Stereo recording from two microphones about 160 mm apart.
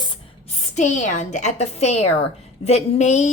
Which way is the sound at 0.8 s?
50° left (ahead or behind).